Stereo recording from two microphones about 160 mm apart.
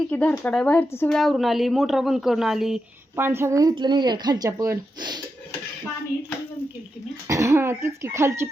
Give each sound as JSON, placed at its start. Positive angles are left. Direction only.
{"t": 0.1, "sound": "speech", "side_deg": 10}
{"t": 3.2, "sound": "speech", "side_deg": -15}
{"t": 7.3, "sound": "speech", "side_deg": -20}